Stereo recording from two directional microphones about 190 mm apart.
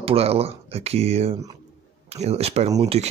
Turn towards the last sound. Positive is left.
turn(degrees=-30)  # may be behind; listen again after turning